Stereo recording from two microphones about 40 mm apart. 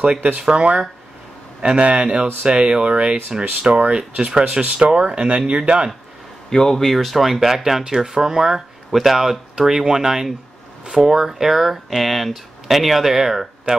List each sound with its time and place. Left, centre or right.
0.4 s speech: right
6.5 s speech: centre
8.9 s speech: centre